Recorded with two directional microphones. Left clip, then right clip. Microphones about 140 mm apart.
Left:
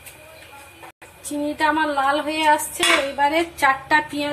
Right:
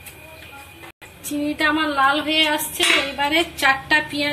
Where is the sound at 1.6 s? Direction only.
45° left (ahead or behind).